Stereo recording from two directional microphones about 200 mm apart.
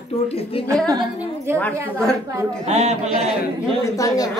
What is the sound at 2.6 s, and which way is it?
Speech, 35° right (ahead or behind).